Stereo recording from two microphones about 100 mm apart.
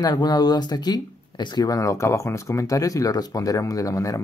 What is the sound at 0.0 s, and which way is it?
Speech, 40° left (ahead or behind).